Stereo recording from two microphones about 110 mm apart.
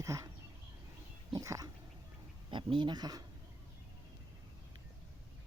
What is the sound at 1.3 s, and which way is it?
Speech, 30° right (ahead or behind).